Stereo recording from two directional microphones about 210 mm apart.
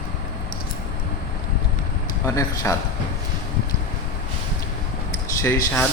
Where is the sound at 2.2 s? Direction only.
15° left (ahead or behind).